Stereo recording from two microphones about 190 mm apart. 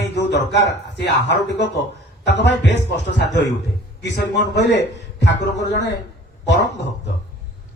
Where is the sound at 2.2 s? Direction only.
65° left (ahead or behind).